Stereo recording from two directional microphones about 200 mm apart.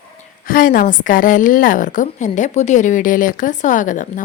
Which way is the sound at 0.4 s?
45° left (ahead or behind).